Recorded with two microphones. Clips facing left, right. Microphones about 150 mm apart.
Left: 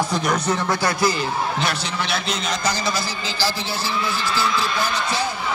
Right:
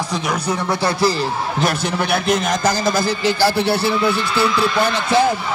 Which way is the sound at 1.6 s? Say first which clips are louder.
Right 5 dB; 55° right (ahead or behind).